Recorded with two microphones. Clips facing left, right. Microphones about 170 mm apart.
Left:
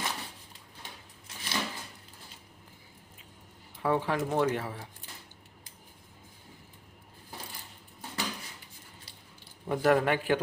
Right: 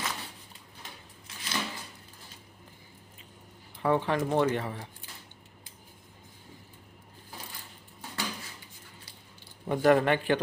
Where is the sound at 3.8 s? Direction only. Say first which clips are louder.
Right 2 dB; 5° left (ahead or behind).